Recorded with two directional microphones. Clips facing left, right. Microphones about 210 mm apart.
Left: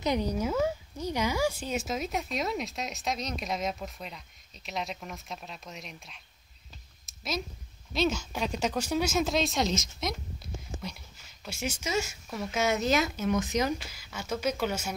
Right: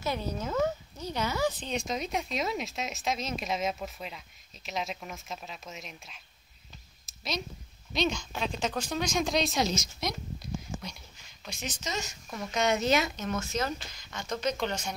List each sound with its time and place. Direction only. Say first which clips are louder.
0.0 s a woman's voice: left 5 dB; 15° left (ahead or behind); by 6.2 s centre (ahead or behind)
7.1 s a sound: left 1 dB; centre (ahead or behind)
7.9 s a woman's voice: left 2 dB; 5° left (ahead or behind)
11.4 s a woman's voice: left 4 dB; 10° left (ahead or behind)